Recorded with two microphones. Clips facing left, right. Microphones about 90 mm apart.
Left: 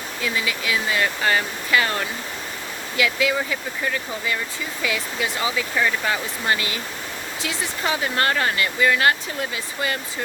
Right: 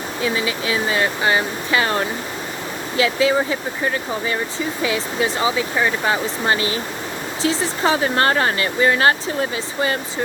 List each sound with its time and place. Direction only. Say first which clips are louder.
0.2 s speech: right 4 dB; 25° right (ahead or behind)